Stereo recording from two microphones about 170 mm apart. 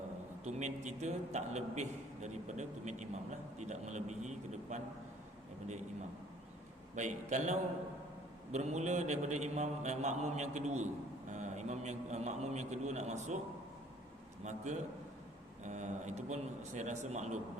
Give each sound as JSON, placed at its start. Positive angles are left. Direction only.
{"t": 0.4, "sound": "a man's voice", "side_deg": -45}
{"t": 6.9, "sound": "a man's voice", "side_deg": -45}
{"t": 14.4, "sound": "a man's voice", "side_deg": -45}